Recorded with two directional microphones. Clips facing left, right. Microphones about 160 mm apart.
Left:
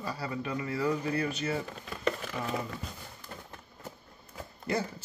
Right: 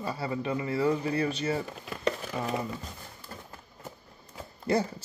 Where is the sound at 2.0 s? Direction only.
30° right (ahead or behind).